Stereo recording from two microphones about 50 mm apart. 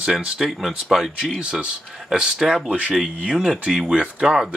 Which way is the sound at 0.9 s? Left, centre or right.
Centre.